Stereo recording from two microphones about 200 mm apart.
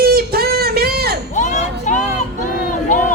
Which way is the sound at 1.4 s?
40° left (ahead or behind).